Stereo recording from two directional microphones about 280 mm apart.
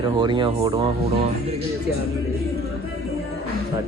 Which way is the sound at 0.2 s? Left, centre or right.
Centre.